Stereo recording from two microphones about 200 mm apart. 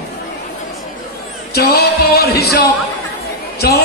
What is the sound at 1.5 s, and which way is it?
Music, 50° left (ahead or behind).